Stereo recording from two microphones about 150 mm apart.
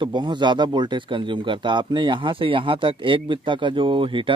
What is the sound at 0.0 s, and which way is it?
Speech, 30° right (ahead or behind).